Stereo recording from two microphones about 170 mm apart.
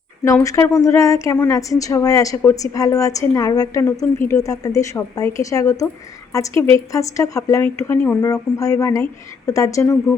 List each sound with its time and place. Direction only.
0.3 s speech: 20° left (ahead or behind)